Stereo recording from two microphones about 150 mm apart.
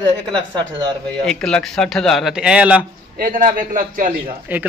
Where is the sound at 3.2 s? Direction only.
70° right (ahead or behind).